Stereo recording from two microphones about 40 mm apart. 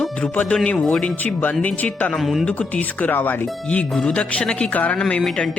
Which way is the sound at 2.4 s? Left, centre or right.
Left.